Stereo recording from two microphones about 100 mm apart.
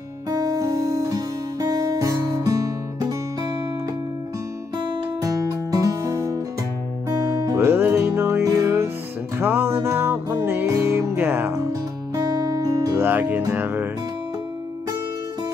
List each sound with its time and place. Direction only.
0.3 s music: 35° right (ahead or behind)
5.2 s music: 35° right (ahead or behind)
12.2 s music: 40° right (ahead or behind)
13.0 s music: 20° right (ahead or behind)